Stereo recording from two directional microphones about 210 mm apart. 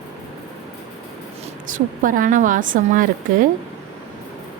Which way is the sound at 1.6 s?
40° right (ahead or behind).